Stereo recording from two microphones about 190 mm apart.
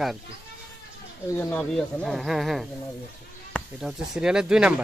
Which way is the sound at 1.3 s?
10° left (ahead or behind).